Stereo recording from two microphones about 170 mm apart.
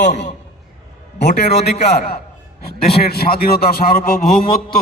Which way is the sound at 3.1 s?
65° left (ahead or behind).